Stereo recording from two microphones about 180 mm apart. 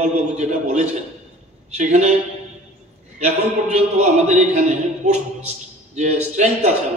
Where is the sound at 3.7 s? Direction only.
40° right (ahead or behind).